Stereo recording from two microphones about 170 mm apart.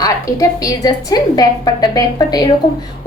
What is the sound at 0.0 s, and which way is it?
A woman's voice, 20° left (ahead or behind).